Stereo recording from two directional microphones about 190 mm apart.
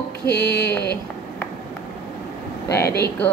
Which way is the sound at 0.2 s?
60° left (ahead or behind).